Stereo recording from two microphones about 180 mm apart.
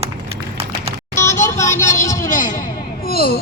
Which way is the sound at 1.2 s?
40° left (ahead or behind).